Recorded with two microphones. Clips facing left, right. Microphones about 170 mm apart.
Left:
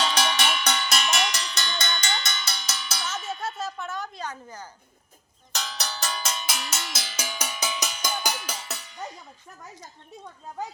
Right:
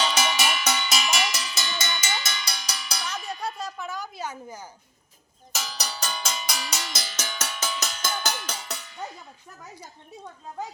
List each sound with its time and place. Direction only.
0.0 s cowbell: 5° right (ahead or behind)
5.5 s music: 5° right (ahead or behind)